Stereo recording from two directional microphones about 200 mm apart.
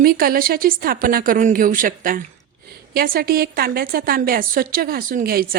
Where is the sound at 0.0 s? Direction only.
45° right (ahead or behind).